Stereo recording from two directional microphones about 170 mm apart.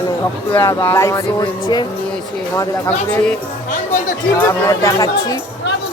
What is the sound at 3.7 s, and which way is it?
Music, 50° left (ahead or behind).